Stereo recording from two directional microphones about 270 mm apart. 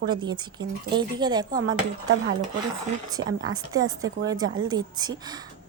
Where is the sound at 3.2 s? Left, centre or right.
Right.